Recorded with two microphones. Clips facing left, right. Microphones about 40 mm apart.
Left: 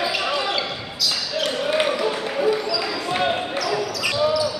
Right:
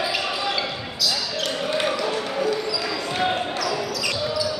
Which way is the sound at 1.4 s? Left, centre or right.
Centre.